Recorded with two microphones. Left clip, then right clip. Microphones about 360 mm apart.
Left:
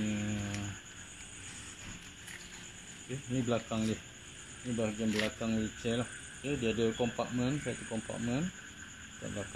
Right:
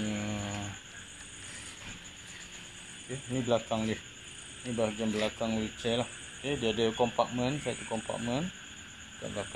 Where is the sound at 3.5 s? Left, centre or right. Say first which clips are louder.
Right 6 dB; centre.